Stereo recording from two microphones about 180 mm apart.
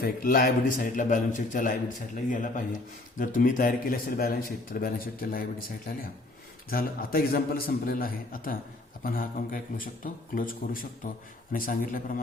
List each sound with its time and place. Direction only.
0.0 s a man's voice: 55° left (ahead or behind)
6.7 s a man's voice: 55° left (ahead or behind)